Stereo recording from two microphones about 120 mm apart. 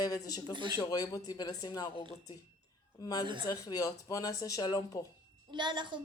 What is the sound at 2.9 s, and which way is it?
A woman's voice, 30° left (ahead or behind).